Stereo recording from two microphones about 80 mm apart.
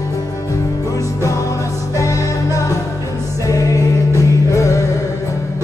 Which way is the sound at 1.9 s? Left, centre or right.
Left.